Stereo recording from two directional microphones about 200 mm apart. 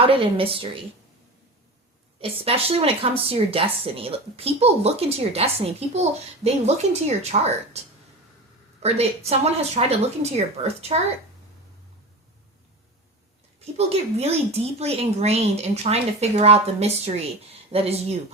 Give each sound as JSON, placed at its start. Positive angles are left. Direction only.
{"t": 0.0, "sound": "speech", "side_deg": -25}
{"t": 2.4, "sound": "speech", "side_deg": -30}
{"t": 8.8, "sound": "speech", "side_deg": -30}
{"t": 13.6, "sound": "speech", "side_deg": -30}